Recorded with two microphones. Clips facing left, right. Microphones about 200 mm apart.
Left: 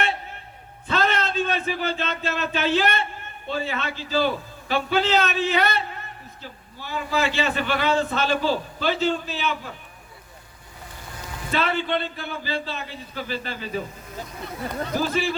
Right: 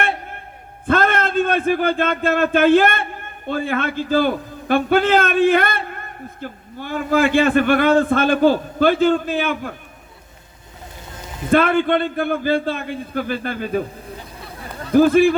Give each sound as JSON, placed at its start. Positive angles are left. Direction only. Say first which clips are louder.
{"t": 0.0, "sound": "a sound", "louder": "right 4 dB", "side_deg": -55}
{"t": 0.9, "sound": "a man's voice", "louder": "right 6 dB", "side_deg": -50}
{"t": 11.5, "sound": "a man's voice", "louder": "right 9 dB", "side_deg": -50}
{"t": 14.9, "sound": "a man's voice", "louder": "right 14 dB", "side_deg": -55}